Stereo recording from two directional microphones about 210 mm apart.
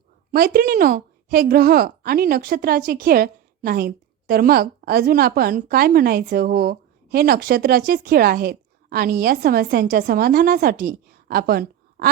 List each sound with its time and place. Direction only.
0.3 s speech: 45° right (ahead or behind)